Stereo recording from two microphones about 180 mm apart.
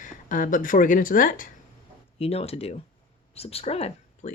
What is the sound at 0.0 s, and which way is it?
Speech, 45° left (ahead or behind).